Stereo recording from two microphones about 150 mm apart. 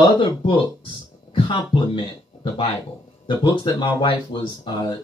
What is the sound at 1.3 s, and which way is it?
Speech, 35° left (ahead or behind).